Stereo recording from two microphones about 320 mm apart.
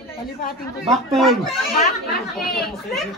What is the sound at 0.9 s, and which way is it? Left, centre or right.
Speech, centre.